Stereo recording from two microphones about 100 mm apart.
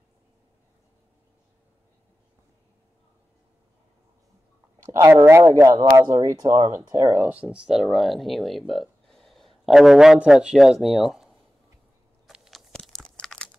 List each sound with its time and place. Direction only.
4.9 s a man's voice: 25° right (ahead or behind)
7.2 s speech: 10° right (ahead or behind)
12.3 s a sound: 5° right (ahead or behind)
12.7 s crunch: 5° left (ahead or behind)